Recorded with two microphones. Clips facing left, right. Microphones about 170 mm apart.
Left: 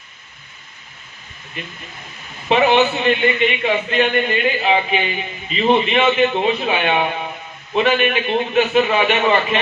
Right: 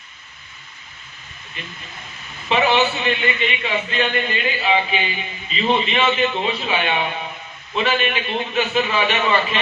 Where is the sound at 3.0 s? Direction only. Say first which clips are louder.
Left 5 dB; 55° left (ahead or behind).